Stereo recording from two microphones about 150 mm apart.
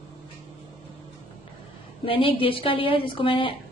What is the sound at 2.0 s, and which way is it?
A woman's voice, 35° left (ahead or behind).